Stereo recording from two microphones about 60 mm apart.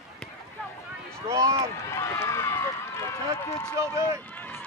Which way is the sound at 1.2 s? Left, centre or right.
Right.